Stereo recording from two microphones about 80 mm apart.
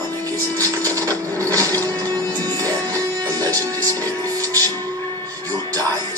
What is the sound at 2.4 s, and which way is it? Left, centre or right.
Music, right.